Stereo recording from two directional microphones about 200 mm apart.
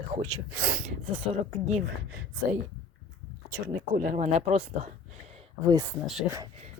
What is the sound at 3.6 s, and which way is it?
Speech, 45° right (ahead or behind).